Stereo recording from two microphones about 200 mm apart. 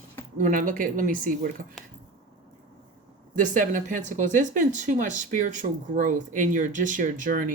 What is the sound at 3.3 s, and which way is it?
Speech, 40° right (ahead or behind).